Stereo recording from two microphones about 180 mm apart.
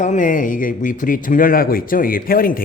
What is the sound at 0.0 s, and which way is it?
Speech, 45° left (ahead or behind).